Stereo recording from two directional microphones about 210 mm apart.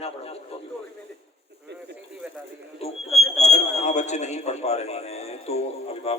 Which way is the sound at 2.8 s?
30° left (ahead or behind).